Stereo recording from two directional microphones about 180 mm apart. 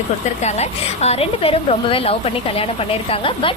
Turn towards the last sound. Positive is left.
turn(degrees=30)  # may be behind; listen again after turning